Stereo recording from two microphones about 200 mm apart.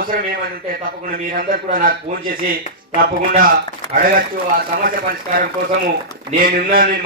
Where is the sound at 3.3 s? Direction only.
45° right (ahead or behind).